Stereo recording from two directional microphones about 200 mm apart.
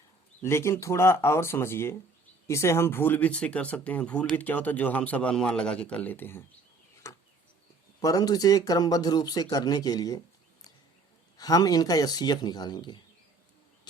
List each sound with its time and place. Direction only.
0.4 s speech: 15° left (ahead or behind)
6.9 s chop: 15° left (ahead or behind)
8.0 s speech: 20° left (ahead or behind)
11.3 s speech: 20° left (ahead or behind)